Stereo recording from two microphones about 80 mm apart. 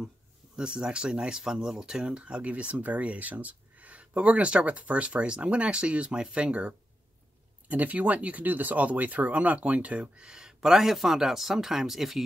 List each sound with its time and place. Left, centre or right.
0.6 s speech: centre